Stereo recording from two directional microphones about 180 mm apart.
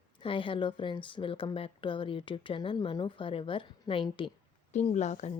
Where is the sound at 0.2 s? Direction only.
30° left (ahead or behind).